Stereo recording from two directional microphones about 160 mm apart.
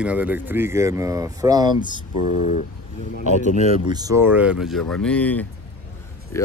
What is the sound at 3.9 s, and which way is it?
Speech, 20° right (ahead or behind).